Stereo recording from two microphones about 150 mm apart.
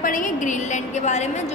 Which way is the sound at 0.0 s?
60° left (ahead or behind).